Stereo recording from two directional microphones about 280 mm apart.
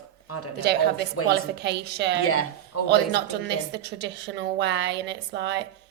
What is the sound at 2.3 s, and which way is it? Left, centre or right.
Speech, left.